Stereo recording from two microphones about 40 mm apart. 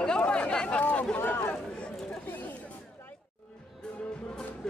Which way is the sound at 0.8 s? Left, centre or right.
Left.